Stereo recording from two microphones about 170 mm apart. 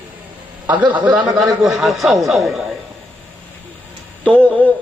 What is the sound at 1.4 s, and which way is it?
A man's voice, centre (ahead or behind).